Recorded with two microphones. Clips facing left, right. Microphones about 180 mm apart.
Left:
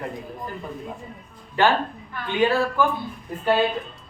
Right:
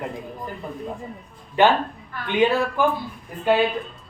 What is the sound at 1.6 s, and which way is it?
A woman's voice, 20° right (ahead or behind).